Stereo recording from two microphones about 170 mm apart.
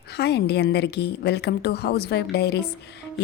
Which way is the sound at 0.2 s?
75° left (ahead or behind).